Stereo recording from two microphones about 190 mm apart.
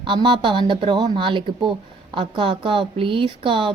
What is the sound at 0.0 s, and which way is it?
A woman's voice, 25° right (ahead or behind).